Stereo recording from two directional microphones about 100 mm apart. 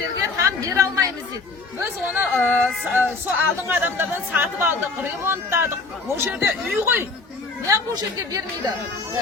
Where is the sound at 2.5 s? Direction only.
20° right (ahead or behind).